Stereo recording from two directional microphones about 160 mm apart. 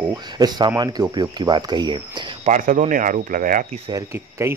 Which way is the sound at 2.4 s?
50° right (ahead or behind).